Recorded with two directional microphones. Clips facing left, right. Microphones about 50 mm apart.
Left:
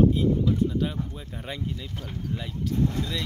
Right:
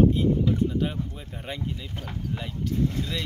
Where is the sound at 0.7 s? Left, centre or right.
Centre.